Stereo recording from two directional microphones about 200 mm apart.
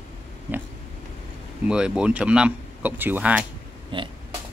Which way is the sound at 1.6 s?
5° right (ahead or behind).